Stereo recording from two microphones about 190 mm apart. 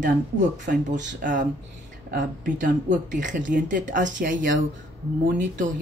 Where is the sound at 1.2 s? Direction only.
45° right (ahead or behind).